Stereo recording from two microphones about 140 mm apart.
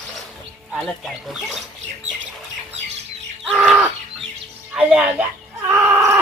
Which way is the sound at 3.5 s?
Centre (ahead or behind).